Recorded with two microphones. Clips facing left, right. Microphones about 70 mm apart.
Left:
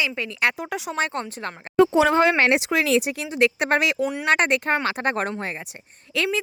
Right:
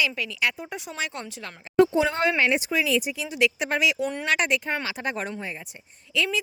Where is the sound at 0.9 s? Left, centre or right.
Left.